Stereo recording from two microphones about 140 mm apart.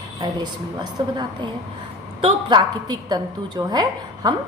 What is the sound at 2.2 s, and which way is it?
A woman's voice, 35° right (ahead or behind).